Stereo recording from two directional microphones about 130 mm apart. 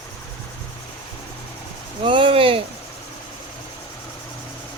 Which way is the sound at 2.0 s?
40° right (ahead or behind).